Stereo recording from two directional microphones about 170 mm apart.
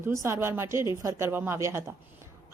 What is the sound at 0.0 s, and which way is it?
A woman's voice, 15° right (ahead or behind).